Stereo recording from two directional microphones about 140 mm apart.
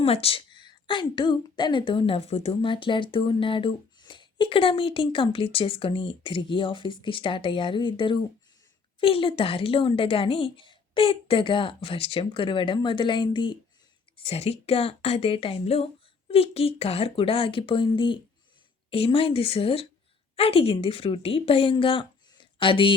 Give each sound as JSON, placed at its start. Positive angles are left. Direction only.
{"t": 0.0, "sound": "a woman's voice", "side_deg": 45}
{"t": 14.3, "sound": "a woman's voice", "side_deg": 45}